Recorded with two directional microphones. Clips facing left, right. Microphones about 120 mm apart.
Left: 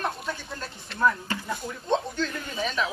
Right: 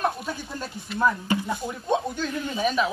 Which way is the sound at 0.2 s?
5° right (ahead or behind).